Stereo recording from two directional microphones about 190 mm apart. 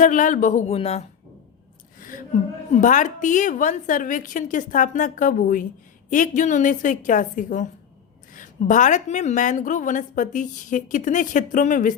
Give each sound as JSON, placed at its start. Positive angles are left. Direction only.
{"t": 0.0, "sound": "speech", "side_deg": 45}
{"t": 2.0, "sound": "a sound", "side_deg": 45}
{"t": 2.7, "sound": "a woman's voice", "side_deg": 40}